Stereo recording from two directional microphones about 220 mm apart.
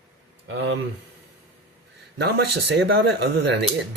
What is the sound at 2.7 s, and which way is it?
Speech, 50° right (ahead or behind).